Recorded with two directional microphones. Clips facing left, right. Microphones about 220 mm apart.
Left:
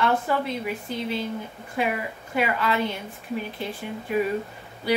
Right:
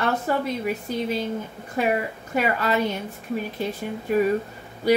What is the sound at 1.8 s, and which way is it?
A woman's voice, 45° right (ahead or behind).